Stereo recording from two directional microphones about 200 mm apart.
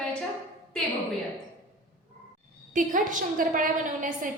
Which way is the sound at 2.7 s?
40° right (ahead or behind).